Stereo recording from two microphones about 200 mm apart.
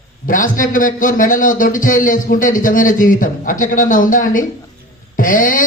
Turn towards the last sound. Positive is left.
turn(degrees=45)  # may be behind; listen again after turning